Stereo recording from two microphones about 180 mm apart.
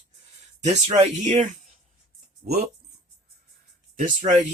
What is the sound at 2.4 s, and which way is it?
Speech, 45° right (ahead or behind).